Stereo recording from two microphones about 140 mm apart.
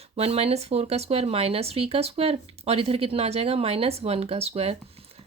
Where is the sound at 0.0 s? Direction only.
45° right (ahead or behind).